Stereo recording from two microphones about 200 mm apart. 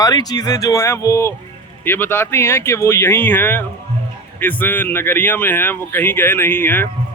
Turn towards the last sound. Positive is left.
turn(degrees=10)  # may be behind; listen again after turning